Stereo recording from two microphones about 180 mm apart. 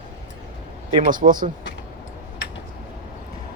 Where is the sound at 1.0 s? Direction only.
50° right (ahead or behind).